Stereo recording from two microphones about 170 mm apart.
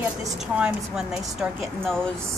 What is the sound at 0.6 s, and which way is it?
A woman's voice, 5° right (ahead or behind).